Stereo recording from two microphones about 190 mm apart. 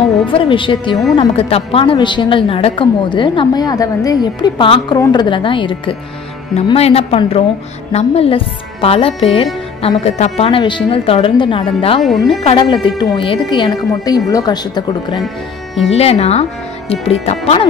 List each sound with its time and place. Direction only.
0.3 s a woman's voice: 25° left (ahead or behind)
15.9 s speech: 35° left (ahead or behind)